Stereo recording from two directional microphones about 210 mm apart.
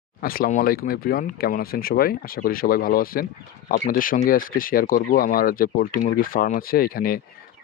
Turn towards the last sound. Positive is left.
turn(degrees=45)  # may be behind; listen again after turning